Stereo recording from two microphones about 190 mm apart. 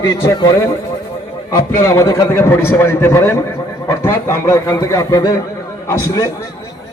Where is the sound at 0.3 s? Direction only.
25° left (ahead or behind).